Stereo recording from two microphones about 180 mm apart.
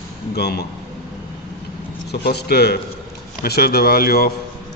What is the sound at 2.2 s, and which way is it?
A man's voice, 65° left (ahead or behind).